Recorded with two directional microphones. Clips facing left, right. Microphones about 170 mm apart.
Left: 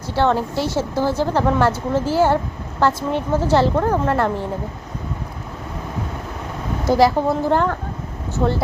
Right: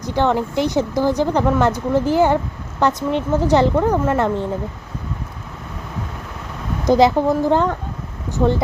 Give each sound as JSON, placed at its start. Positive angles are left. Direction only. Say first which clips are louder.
{"t": 0.0, "sound": "a woman's voice", "louder": "even", "side_deg": -15}
{"t": 6.8, "sound": "a woman's voice", "louder": "right 2 dB", "side_deg": -20}